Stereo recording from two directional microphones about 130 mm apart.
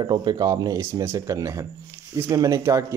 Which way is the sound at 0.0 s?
35° right (ahead or behind).